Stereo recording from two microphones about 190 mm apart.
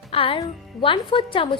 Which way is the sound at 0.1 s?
30° left (ahead or behind).